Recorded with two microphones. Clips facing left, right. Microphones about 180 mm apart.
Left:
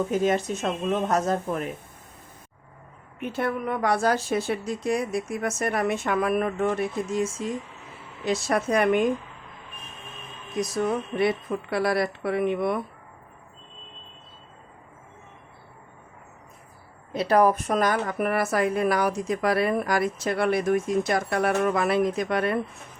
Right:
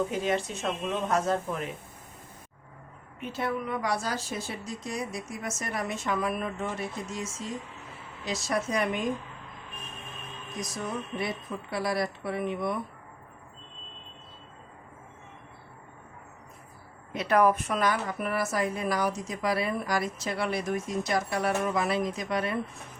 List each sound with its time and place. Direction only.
0.1 s speech: 45° left (ahead or behind)
3.2 s speech: 55° left (ahead or behind)
10.6 s speech: 65° left (ahead or behind)
17.1 s speech: 35° left (ahead or behind); by 22.5 s 60° left (ahead or behind)